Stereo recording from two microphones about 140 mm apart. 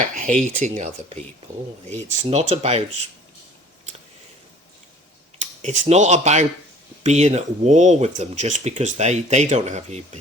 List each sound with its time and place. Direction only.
0.0 s speech: 65° right (ahead or behind); by 2.8 s 50° right (ahead or behind)
5.4 s speech: 55° right (ahead or behind)